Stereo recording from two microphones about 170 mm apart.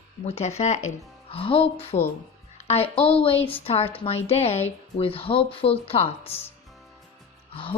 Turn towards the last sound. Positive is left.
turn(degrees=30)  # may be behind; listen again after turning